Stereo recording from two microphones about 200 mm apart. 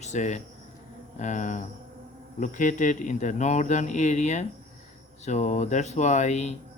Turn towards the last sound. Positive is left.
turn(degrees=35)  # may be behind; listen again after turning